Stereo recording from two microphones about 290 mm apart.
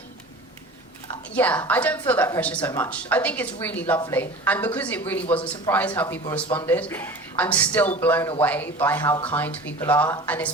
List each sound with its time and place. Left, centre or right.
1.4 s a woman's voice: centre